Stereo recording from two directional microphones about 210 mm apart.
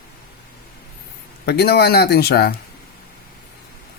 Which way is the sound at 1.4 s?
50° left (ahead or behind).